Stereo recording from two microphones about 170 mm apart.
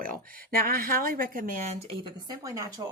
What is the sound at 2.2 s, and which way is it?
Speech, 20° right (ahead or behind).